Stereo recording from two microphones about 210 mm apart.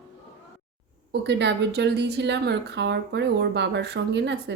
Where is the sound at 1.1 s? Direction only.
55° right (ahead or behind).